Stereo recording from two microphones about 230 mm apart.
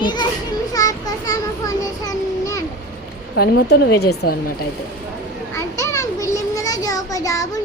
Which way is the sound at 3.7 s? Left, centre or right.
Left.